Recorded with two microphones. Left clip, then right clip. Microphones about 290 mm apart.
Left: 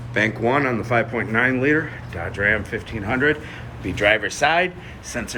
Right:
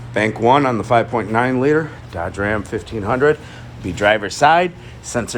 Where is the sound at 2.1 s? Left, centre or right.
Right.